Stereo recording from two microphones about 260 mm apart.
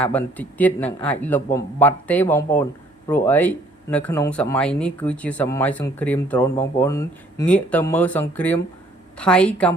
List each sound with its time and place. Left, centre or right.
0.0 s a woman's voice: centre